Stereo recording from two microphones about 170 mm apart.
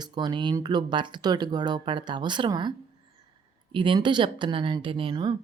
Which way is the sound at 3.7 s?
30° right (ahead or behind).